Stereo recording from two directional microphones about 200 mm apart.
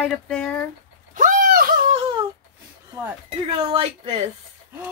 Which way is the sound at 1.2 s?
40° right (ahead or behind).